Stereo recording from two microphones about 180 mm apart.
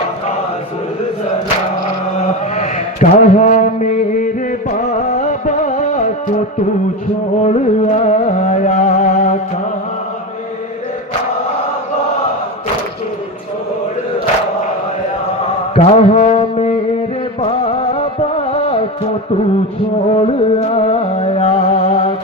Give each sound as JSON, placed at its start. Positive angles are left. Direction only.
{"t": 2.1, "sound": "mantra", "side_deg": 40}
{"t": 4.7, "sound": "music", "side_deg": 40}
{"t": 7.4, "sound": "music", "side_deg": 40}
{"t": 15.7, "sound": "mantra", "side_deg": 35}
{"t": 17.4, "sound": "music", "side_deg": 30}
{"t": 20.1, "sound": "music", "side_deg": 35}